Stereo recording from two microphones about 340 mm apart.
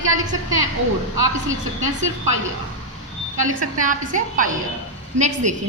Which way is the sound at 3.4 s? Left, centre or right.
Right.